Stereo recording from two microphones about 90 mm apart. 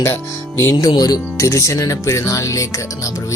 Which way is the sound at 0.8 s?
45° left (ahead or behind).